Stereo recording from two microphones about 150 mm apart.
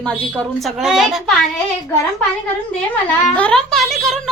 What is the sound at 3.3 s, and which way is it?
Speech, 5° left (ahead or behind).